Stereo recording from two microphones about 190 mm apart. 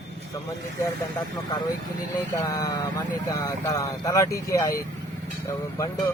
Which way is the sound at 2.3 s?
20° left (ahead or behind).